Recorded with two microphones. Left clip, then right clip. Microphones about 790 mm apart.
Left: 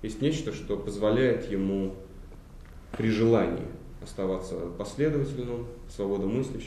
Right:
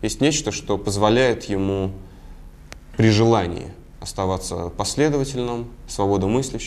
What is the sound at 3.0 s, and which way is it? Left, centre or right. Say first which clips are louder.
A man's voice: right 7 dB; right.